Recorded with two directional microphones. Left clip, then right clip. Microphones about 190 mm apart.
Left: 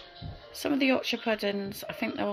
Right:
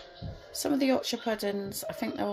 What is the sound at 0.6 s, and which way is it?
Speech, 5° right (ahead or behind).